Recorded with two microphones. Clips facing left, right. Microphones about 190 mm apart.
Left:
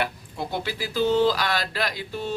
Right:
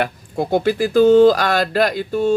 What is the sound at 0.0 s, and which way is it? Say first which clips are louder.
A man's voice: right 8 dB; 50° right (ahead or behind).